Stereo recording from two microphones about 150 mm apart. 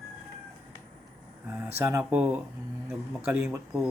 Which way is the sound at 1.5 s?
15° right (ahead or behind).